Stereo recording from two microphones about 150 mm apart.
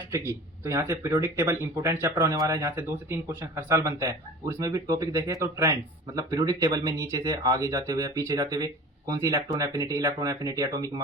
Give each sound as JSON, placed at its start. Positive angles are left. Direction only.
{"t": 0.1, "sound": "speech", "side_deg": -20}